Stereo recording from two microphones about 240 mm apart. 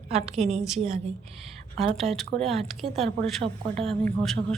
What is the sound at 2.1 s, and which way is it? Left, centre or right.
A woman's voice, centre.